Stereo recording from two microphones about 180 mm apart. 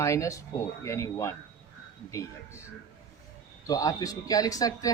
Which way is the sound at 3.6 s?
20° left (ahead or behind).